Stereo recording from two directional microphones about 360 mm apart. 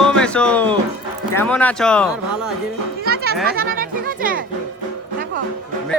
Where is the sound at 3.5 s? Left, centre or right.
Right.